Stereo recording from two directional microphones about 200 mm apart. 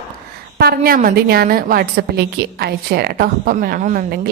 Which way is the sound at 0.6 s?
50° right (ahead or behind).